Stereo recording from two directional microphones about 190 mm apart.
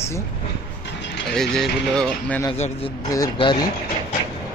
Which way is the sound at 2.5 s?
30° left (ahead or behind).